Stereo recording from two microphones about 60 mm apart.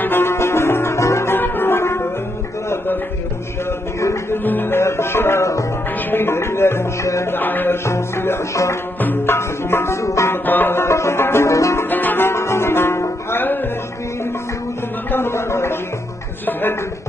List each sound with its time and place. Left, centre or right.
0.0 s music: left
1.3 s music: left
4.5 s music: left
6.0 s music: left
7.3 s music: left
7.8 s music: left
10.3 s music: left
11.5 s music: left
11.9 s music: left
12.3 s music: left
15.0 s a sound: left